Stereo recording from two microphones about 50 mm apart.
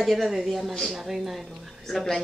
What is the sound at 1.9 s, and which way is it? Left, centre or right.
Speech, centre.